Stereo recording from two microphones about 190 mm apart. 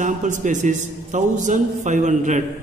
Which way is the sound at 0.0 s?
40° right (ahead or behind).